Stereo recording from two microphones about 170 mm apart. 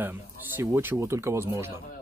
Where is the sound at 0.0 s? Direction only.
15° right (ahead or behind).